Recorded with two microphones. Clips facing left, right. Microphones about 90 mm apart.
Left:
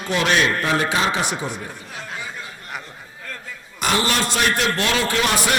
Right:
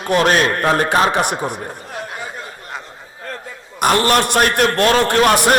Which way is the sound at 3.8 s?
50° right (ahead or behind).